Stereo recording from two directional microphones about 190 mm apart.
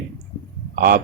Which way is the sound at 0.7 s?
50° right (ahead or behind).